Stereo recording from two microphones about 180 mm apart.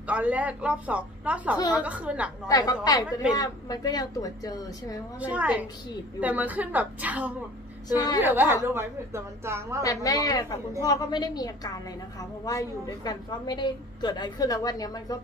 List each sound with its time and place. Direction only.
0.0 s a woman's voice: 5° right (ahead or behind)
2.4 s a woman's voice: 20° left (ahead or behind)
5.2 s a woman's voice: 10° right (ahead or behind)
7.9 s a woman's voice: 20° left (ahead or behind)
8.2 s a woman's voice: 10° right (ahead or behind)
9.8 s a woman's voice: 20° left (ahead or behind)